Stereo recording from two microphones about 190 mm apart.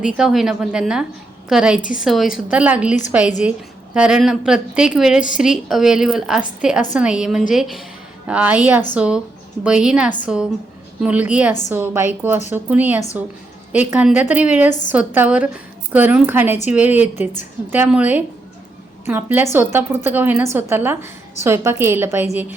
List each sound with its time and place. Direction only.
0.0 s a woman's voice: 5° right (ahead or behind)
14.7 s a woman's voice: 40° left (ahead or behind)
14.9 s a woman's voice: 10° right (ahead or behind)